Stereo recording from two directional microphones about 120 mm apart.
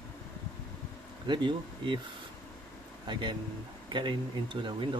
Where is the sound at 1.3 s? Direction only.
40° right (ahead or behind).